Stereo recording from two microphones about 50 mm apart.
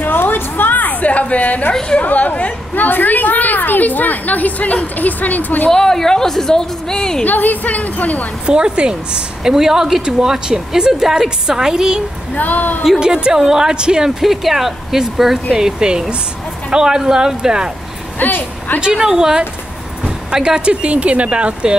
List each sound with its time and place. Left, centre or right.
0.0 s a sound: left
1.7 s a woman's voice: centre
2.0 s a woman's voice: left
5.7 s a woman's voice: centre
7.2 s a woman's voice: left
8.5 s a woman's voice: centre
12.4 s a woman's voice: left
13.0 s a woman's voice: centre
14.2 s a woman's voice: centre
18.2 s a woman's voice: left
18.8 s a woman's voice: centre